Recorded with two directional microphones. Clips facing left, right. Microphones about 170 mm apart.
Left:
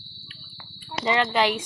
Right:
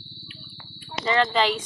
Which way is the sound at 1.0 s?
15° left (ahead or behind).